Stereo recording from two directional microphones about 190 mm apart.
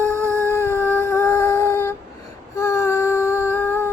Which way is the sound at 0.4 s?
15° left (ahead or behind).